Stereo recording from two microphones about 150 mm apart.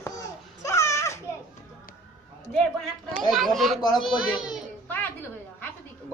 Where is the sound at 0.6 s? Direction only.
20° left (ahead or behind).